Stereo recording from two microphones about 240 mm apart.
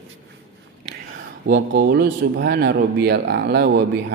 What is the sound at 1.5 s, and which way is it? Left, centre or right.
A man's voice, right.